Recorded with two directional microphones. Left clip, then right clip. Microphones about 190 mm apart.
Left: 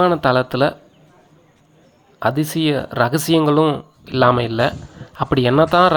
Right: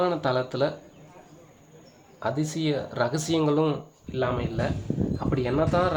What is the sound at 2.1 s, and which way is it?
Speech, 35° left (ahead or behind).